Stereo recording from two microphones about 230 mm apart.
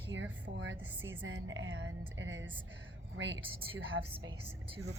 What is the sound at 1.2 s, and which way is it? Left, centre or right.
A woman's voice, right.